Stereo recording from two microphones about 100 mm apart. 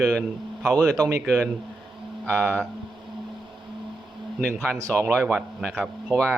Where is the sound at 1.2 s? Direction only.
5° left (ahead or behind).